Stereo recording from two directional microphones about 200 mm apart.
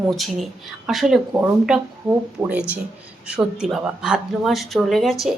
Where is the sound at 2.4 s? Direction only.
15° right (ahead or behind).